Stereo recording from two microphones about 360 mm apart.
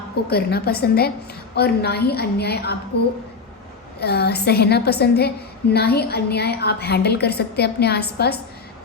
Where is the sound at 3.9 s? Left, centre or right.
Left.